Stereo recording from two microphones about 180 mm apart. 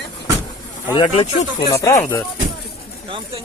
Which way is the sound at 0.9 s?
25° left (ahead or behind).